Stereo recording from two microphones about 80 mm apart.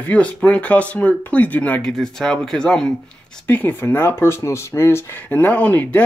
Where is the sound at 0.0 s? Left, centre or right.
Centre.